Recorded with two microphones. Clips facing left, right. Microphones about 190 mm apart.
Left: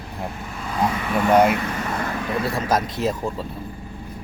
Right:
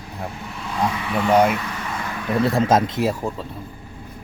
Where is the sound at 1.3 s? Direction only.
Centre (ahead or behind).